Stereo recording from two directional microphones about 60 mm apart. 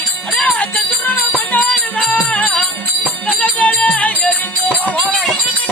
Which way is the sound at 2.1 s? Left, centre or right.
Left.